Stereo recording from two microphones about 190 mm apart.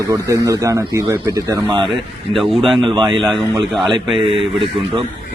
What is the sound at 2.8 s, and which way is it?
Speech, 25° right (ahead or behind).